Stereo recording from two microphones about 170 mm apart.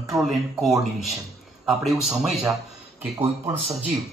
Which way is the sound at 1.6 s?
Centre (ahead or behind).